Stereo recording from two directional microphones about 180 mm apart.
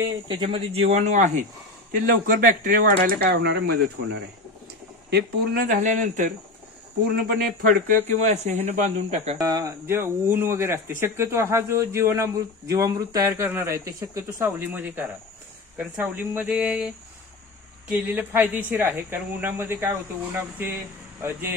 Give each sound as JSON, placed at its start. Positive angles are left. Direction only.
{"t": 0.3, "sound": "speech", "side_deg": -30}
{"t": 5.1, "sound": "speech", "side_deg": -55}
{"t": 7.2, "sound": "speech", "side_deg": -55}
{"t": 8.1, "sound": "speech", "side_deg": -40}
{"t": 9.4, "sound": "speech", "side_deg": -20}
{"t": 17.9, "sound": "speech", "side_deg": -10}
{"t": 21.2, "sound": "speech", "side_deg": -10}